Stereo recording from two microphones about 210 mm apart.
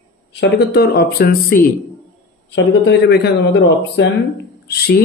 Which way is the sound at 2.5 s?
55° left (ahead or behind).